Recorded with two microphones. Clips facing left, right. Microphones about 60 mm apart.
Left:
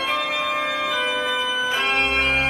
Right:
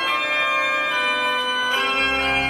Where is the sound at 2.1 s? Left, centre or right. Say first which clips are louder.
Even; right.